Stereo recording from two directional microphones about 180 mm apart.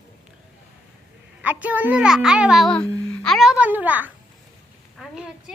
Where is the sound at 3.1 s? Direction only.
Centre (ahead or behind).